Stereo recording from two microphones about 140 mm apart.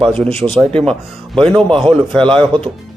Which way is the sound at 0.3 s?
45° right (ahead or behind).